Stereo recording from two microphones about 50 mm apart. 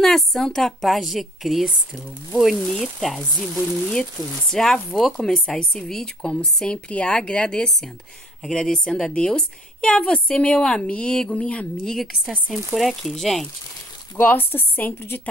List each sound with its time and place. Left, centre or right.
0.0 s a woman's voice: centre
6.7 s a woman's voice: left
9.1 s a woman's voice: centre
12.4 s a woman's voice: centre
14.2 s a woman's voice: left